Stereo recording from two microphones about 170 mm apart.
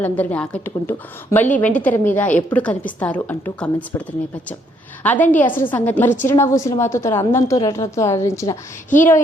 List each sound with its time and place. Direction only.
0.0 s a woman's voice: 10° left (ahead or behind)
5.0 s a woman's voice: 10° left (ahead or behind)